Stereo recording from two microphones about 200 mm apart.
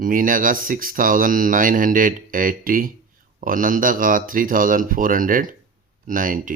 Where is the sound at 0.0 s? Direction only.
45° right (ahead or behind).